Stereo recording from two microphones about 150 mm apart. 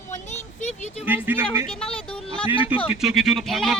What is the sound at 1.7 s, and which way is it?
Speech, 5° left (ahead or behind).